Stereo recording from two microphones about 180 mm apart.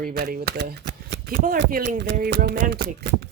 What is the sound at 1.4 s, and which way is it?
Speech, 50° right (ahead or behind).